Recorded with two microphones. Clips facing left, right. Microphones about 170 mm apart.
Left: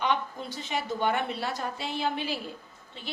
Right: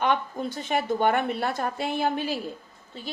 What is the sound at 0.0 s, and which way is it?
A woman's voice, 50° right (ahead or behind).